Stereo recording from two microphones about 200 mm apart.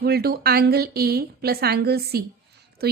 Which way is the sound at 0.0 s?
50° right (ahead or behind).